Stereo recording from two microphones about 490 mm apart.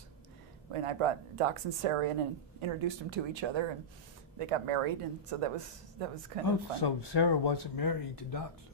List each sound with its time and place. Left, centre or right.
0.7 s a woman's voice: right
4.4 s a woman's voice: right
6.4 s speech: left